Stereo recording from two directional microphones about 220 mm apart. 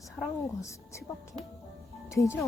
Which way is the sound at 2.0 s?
15° left (ahead or behind).